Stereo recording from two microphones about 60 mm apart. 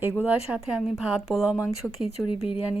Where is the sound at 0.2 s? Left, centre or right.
Right.